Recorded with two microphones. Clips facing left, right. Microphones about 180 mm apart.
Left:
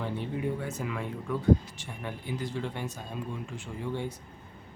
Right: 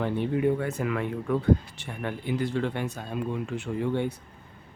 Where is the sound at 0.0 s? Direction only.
65° right (ahead or behind).